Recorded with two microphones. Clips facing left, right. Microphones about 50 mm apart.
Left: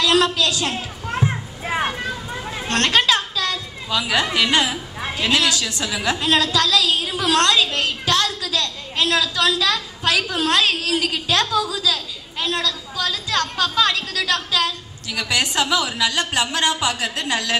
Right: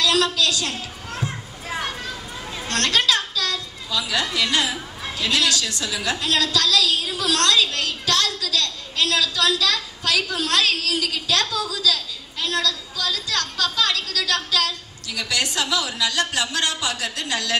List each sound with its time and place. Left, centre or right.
0.0 s a child's voice: left